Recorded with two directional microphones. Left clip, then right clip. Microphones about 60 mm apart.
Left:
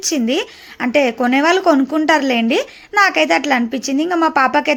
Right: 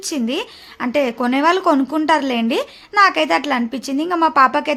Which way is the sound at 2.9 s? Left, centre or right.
Left.